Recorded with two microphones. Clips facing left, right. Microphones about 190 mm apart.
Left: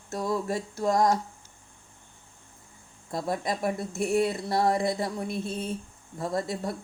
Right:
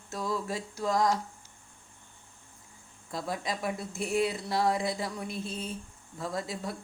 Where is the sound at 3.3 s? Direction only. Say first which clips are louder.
Left 5 dB; 55° left (ahead or behind).